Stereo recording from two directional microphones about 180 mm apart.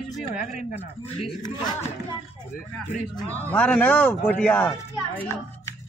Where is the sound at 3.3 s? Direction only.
10° left (ahead or behind).